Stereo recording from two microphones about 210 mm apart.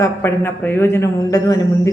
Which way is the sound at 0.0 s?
10° left (ahead or behind).